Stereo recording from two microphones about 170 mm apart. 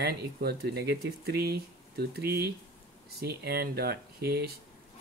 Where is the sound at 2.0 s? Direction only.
65° right (ahead or behind).